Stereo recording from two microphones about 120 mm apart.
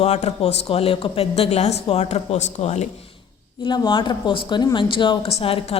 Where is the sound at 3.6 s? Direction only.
40° left (ahead or behind).